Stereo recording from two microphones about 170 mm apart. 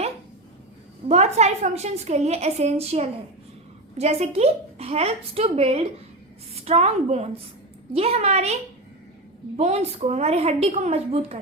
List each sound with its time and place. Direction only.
1.0 s a woman's voice: 40° right (ahead or behind)
9.6 s a woman's voice: 40° right (ahead or behind)